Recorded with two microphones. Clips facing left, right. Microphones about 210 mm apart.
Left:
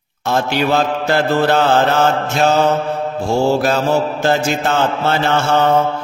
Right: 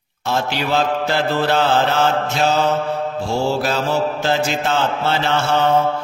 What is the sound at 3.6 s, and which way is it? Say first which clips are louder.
Mantra: left 4 dB; 50° left (ahead or behind).